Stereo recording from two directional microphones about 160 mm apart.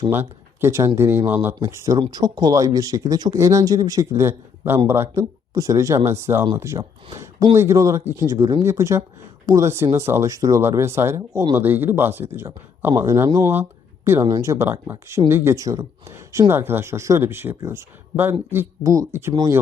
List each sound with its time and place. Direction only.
0.1 s speech: 15° right (ahead or behind)